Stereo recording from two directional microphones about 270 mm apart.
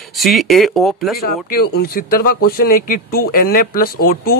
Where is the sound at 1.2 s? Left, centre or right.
Left.